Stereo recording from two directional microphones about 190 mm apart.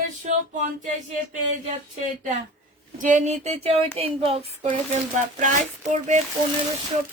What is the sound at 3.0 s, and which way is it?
Speech, 40° right (ahead or behind).